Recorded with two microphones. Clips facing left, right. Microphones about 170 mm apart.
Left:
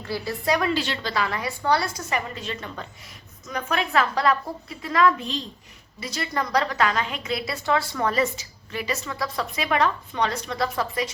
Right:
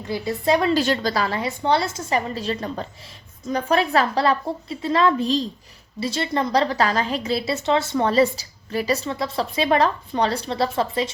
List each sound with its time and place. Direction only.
0.0 s a woman's voice: 20° right (ahead or behind)
0.7 s a woman's voice: 40° right (ahead or behind)